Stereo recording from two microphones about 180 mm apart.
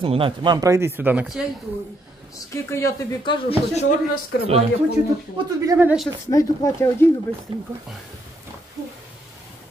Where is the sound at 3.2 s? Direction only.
25° left (ahead or behind).